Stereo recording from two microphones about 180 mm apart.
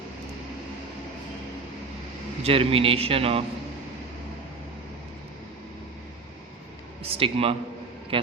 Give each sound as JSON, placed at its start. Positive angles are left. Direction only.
{"t": 2.4, "sound": "a man's voice", "side_deg": -30}
{"t": 7.1, "sound": "a man's voice", "side_deg": -30}